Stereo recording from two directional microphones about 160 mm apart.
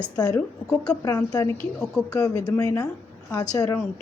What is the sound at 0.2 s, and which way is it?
Speech, 20° left (ahead or behind).